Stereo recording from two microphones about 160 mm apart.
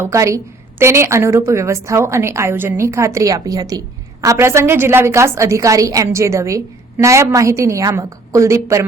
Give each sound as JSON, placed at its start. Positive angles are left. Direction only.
{"t": 0.0, "sound": "a woman's voice", "side_deg": -20}